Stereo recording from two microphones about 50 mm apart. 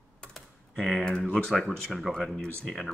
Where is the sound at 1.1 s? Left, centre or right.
Centre.